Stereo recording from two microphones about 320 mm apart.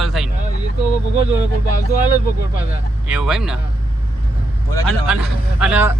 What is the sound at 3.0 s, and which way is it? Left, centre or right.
Speech, centre.